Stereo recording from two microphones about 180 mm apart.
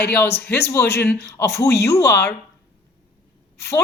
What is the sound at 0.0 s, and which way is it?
Speech, 10° left (ahead or behind).